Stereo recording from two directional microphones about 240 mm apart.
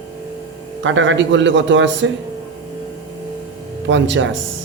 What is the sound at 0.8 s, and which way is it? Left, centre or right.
A man's voice, right.